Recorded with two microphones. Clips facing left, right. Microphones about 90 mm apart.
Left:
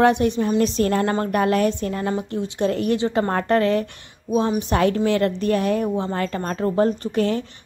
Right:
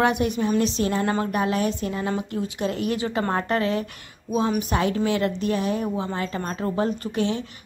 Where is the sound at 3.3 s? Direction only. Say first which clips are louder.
Left 4 dB; 45° left (ahead or behind).